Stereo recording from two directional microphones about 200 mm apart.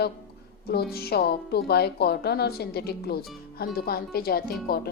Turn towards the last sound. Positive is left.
turn(degrees=50)  # may be behind; listen again after turning